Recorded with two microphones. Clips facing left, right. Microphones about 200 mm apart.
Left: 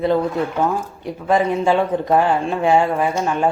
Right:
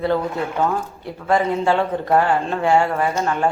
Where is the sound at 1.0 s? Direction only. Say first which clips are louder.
Left 2 dB; 15° left (ahead or behind).